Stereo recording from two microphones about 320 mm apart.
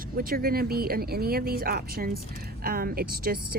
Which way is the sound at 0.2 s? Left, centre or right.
Right.